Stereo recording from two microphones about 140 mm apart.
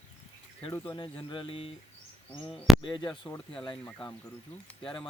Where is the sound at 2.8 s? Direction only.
35° left (ahead or behind).